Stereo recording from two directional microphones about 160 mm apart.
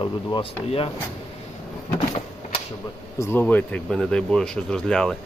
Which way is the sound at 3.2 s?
15° left (ahead or behind).